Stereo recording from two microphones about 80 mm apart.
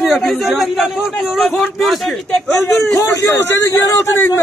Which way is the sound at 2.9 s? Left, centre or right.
Left.